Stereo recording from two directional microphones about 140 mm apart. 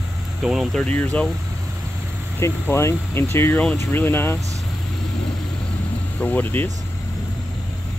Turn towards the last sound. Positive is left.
turn(degrees=15)  # may be behind; listen again after turning